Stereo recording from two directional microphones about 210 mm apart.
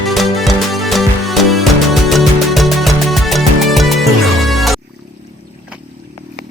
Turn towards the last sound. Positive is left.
turn(degrees=0)  # may be behind; listen again after turning